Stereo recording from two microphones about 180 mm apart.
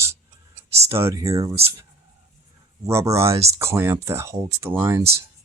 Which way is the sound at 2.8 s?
15° right (ahead or behind).